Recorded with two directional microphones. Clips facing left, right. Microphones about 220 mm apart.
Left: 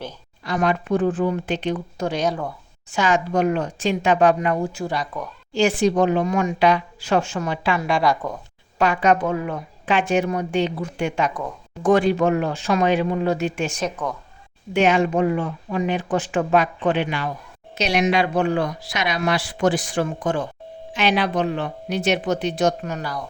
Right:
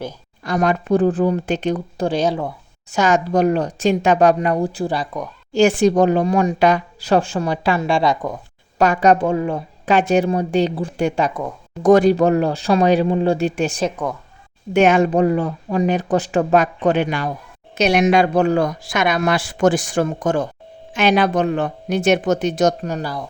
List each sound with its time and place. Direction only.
0.4 s a woman's voice: 45° right (ahead or behind)
2.9 s a woman's voice: 40° right (ahead or behind)
5.5 s a woman's voice: 45° right (ahead or behind)
7.8 s speech: 25° right (ahead or behind)
8.8 s a woman's voice: 40° right (ahead or behind)
14.7 s speech: 50° right (ahead or behind)
15.1 s a woman's voice: 35° right (ahead or behind)